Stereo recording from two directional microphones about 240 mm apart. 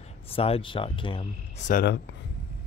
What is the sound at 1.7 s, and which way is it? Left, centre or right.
Speech, left.